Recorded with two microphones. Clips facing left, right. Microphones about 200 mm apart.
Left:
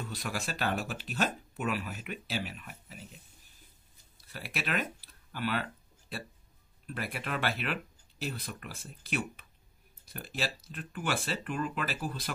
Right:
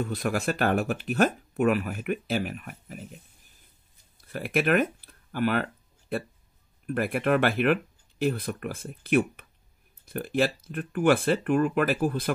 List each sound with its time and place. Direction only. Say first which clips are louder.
0.0 s speech: right 10 dB; 55° right (ahead or behind)
4.3 s speech: right 12 dB; 50° right (ahead or behind)